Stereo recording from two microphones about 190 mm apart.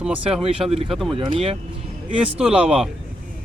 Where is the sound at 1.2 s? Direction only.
25° right (ahead or behind).